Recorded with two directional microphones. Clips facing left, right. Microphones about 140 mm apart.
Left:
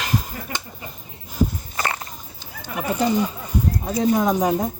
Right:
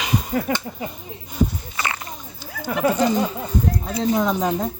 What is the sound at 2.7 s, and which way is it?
Speech, 85° right.